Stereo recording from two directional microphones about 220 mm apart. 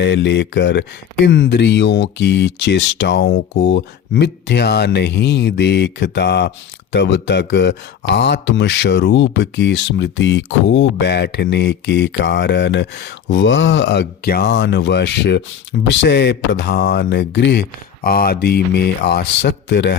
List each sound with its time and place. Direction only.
0.0 s speech: 55° left (ahead or behind)